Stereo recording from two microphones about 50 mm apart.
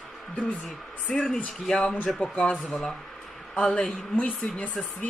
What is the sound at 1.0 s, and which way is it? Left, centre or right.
A man's voice, centre.